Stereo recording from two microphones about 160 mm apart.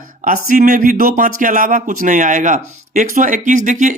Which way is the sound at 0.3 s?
60° right (ahead or behind).